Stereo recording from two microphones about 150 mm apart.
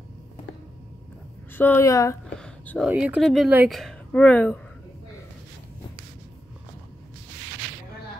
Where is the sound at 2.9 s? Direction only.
10° right (ahead or behind).